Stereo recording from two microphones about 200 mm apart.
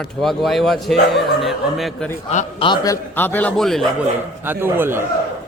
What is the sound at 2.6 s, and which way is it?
A man's voice, 20° left (ahead or behind).